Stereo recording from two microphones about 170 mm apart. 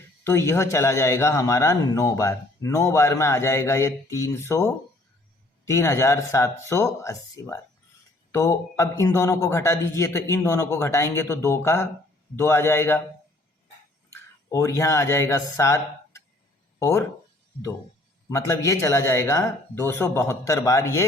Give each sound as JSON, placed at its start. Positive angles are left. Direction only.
{"t": 0.3, "sound": "a man's voice", "side_deg": 15}
{"t": 14.5, "sound": "a man's voice", "side_deg": 15}
{"t": 18.3, "sound": "a man's voice", "side_deg": 15}